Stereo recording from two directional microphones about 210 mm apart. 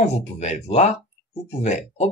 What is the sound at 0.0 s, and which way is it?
Speech, 30° left (ahead or behind).